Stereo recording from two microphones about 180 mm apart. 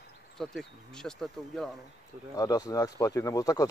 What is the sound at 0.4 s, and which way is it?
Speech, centre (ahead or behind).